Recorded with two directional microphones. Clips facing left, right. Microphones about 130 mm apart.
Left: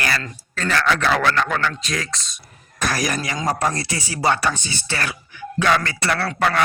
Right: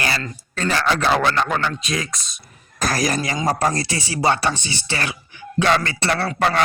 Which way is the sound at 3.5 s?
40° right (ahead or behind).